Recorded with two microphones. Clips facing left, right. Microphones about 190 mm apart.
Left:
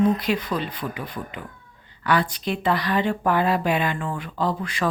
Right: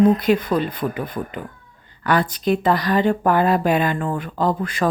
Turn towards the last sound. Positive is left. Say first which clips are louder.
# right 4 dB
turn(degrees=-50)  # may be behind; listen again after turning